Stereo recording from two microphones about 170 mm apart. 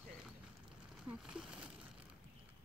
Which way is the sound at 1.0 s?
5° right (ahead or behind).